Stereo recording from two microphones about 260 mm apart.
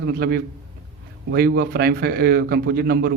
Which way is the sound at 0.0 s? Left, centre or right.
Right.